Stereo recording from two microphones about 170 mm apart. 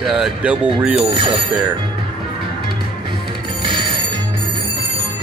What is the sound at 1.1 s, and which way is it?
Speech, 30° right (ahead or behind).